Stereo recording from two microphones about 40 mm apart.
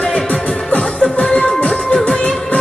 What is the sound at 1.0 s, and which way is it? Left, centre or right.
Music, left.